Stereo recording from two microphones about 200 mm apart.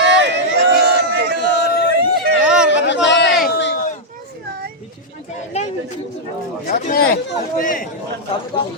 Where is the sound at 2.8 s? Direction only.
60° left (ahead or behind).